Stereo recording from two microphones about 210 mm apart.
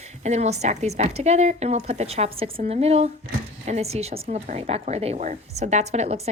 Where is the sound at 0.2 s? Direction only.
30° right (ahead or behind).